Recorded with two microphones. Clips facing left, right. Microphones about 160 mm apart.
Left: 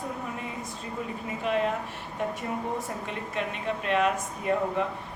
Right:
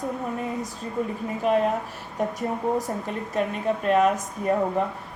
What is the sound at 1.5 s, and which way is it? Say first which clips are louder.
Speech: right 6 dB; 45° right (ahead or behind).